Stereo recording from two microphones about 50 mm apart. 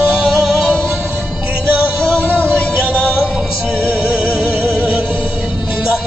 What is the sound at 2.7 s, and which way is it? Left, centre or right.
Music, right.